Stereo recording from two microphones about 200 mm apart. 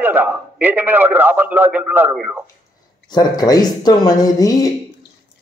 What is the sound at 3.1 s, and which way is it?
Speech, 20° left (ahead or behind).